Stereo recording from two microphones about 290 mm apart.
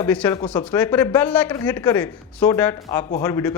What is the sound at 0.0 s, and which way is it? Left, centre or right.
Speech, centre.